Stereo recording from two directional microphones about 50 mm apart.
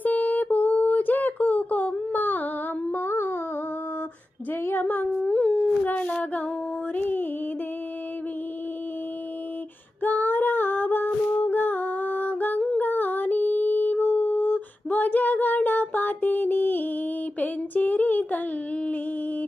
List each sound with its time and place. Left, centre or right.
0.0 s a sound: left
2.9 s music: left
4.7 s humming: left
5.2 s howl: left
6.9 s music: left
10.0 s female singing: left
11.5 s a sound: left